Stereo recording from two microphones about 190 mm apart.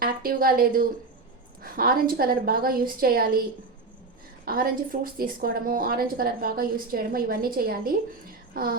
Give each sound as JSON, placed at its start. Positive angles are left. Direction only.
{"t": 0.0, "sound": "speech", "side_deg": -50}
{"t": 4.4, "sound": "speech", "side_deg": -50}